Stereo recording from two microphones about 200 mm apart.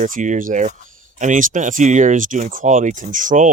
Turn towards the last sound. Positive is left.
turn(degrees=-40)  # may be behind; listen again after turning